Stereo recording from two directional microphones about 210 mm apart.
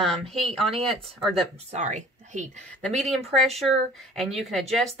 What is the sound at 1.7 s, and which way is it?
Speech, 35° right (ahead or behind).